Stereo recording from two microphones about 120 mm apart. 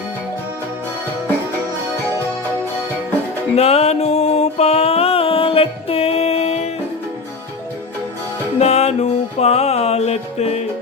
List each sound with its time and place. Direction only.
3.5 s music: 60° left (ahead or behind)
8.5 s music: 65° left (ahead or behind)